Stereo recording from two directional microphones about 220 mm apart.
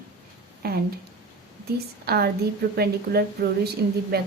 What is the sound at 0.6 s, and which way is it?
Speech, 45° right (ahead or behind).